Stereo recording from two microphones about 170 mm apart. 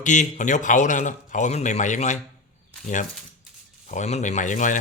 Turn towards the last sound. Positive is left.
turn(degrees=50)  # may be behind; listen again after turning